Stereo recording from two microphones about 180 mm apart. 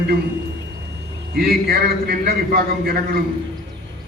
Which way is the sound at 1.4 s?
60° right (ahead or behind).